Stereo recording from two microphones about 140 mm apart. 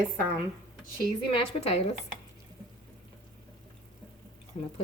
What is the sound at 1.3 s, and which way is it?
Speech, 40° left (ahead or behind).